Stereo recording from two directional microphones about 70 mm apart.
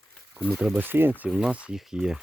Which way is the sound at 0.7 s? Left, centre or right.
Right.